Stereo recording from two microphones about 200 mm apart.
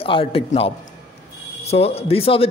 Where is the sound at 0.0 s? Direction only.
25° left (ahead or behind).